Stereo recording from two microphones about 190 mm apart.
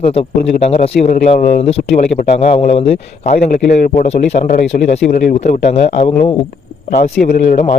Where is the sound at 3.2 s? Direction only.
50° left (ahead or behind).